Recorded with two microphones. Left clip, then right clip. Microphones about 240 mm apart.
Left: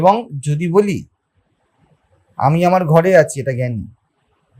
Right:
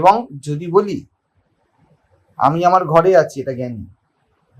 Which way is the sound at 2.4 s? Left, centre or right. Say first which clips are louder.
Right 1 dB; left.